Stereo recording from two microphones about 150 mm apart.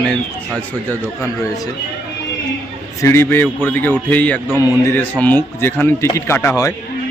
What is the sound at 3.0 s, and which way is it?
A man's voice, 15° left (ahead or behind).